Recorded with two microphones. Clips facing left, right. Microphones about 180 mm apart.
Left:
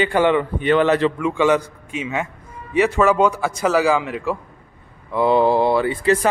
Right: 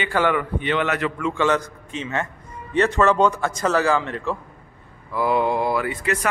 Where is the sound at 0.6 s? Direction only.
45° left (ahead or behind).